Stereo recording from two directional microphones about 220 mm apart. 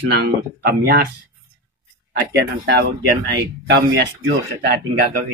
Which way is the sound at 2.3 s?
45° right (ahead or behind).